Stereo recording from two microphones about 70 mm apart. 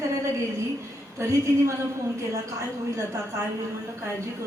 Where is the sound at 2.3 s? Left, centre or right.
Right.